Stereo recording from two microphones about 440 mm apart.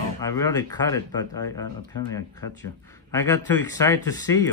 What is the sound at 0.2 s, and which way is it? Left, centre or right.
A man's voice, centre.